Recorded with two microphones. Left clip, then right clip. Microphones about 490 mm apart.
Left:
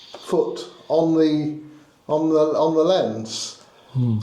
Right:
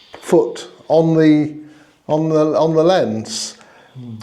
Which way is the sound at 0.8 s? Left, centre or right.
Right.